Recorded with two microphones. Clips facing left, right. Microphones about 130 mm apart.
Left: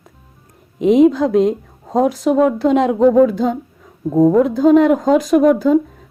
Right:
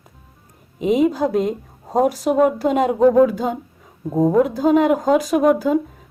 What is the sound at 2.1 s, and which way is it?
Speech, 40° right (ahead or behind).